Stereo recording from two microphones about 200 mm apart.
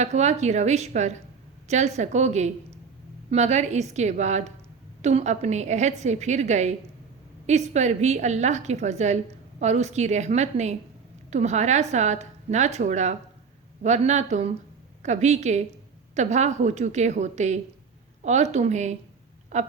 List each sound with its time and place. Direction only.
0.0 s a woman's voice: 35° right (ahead or behind)